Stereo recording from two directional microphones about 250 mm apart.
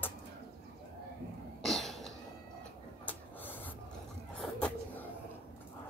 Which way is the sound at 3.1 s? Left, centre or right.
Centre.